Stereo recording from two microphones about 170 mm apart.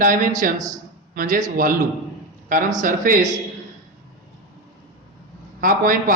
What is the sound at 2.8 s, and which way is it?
Speech, 50° right (ahead or behind).